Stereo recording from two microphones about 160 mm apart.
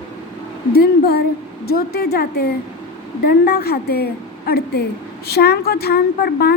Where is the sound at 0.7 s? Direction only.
80° left.